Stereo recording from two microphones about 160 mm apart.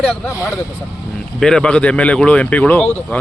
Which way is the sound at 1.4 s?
5° left (ahead or behind).